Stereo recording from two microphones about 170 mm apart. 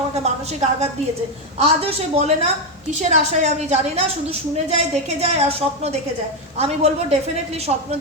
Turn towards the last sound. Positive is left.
turn(degrees=-40)  # may be behind; listen again after turning